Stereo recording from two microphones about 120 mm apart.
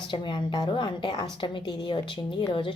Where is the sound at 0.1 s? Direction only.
40° left (ahead or behind).